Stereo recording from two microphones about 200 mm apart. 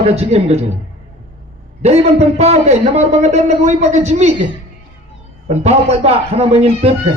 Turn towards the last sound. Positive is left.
turn(degrees=-30)  # may be behind; listen again after turning